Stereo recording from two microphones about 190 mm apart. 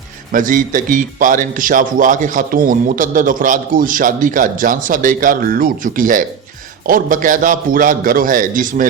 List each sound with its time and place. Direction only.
0.3 s speech: 45° right (ahead or behind)